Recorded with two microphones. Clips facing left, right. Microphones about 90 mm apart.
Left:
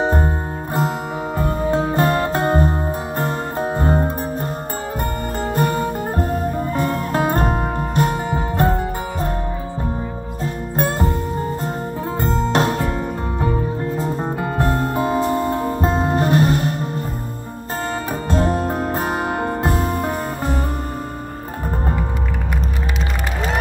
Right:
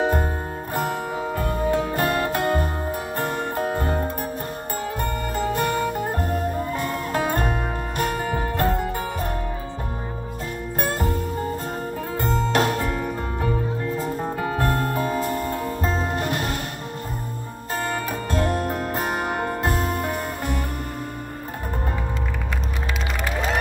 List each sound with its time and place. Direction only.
0.0 s music: 25° left (ahead or behind)
1.4 s music: 30° left (ahead or behind)
5.4 s music: 35° left (ahead or behind)
10.8 s music: 30° left (ahead or behind)
12.2 s music: 30° left (ahead or behind)
18.3 s music: 25° left (ahead or behind)